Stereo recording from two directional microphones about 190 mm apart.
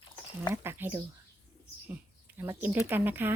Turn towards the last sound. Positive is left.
turn(degrees=-10)  # may be behind; listen again after turning